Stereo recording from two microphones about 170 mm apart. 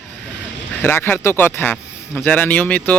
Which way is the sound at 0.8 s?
10° left (ahead or behind).